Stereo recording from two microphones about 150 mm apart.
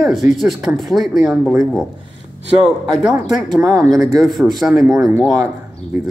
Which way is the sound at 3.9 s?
Centre (ahead or behind).